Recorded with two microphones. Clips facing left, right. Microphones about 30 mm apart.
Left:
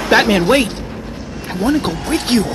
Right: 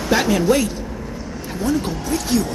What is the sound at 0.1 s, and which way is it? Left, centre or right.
Speech, left.